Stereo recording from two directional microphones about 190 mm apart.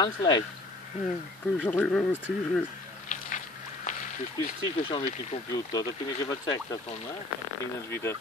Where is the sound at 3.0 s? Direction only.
40° left (ahead or behind).